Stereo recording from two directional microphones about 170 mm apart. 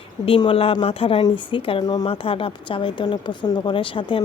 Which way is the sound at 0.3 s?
30° left (ahead or behind).